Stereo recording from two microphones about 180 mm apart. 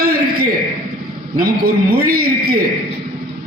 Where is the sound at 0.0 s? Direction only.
55° right (ahead or behind).